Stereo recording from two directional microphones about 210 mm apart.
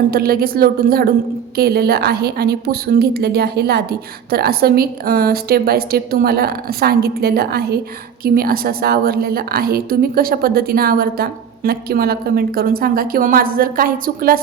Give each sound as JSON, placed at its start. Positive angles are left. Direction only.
{"t": 0.1, "sound": "a woman's voice", "side_deg": -45}